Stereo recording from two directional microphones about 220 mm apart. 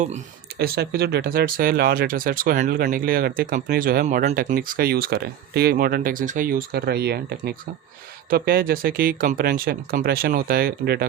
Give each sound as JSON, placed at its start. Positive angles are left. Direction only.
{"t": 0.6, "sound": "speech", "side_deg": -45}